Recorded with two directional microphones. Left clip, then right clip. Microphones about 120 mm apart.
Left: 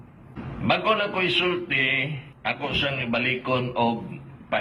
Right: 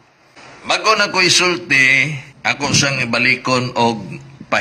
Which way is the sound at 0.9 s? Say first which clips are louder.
Right 14 dB; 25° right (ahead or behind).